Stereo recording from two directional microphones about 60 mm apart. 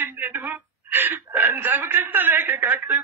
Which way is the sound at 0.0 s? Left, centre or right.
Right.